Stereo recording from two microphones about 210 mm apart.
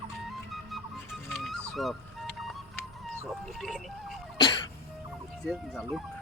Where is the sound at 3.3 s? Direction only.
Centre (ahead or behind).